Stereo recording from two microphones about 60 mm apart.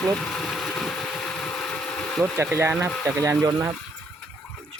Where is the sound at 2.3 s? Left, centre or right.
Right.